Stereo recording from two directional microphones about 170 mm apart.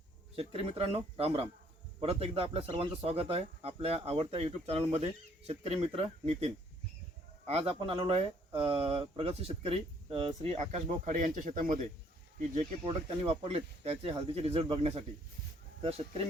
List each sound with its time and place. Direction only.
0.3 s speech: 35° right (ahead or behind); by 11.8 s 50° right (ahead or behind)
12.4 s speech: 40° right (ahead or behind)